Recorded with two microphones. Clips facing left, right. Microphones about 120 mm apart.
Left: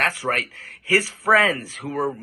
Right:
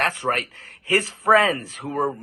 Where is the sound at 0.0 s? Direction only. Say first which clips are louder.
Right 1 dB; 20° right (ahead or behind).